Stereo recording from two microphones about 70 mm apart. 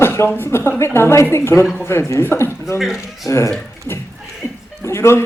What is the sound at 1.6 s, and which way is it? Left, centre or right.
Speech, centre.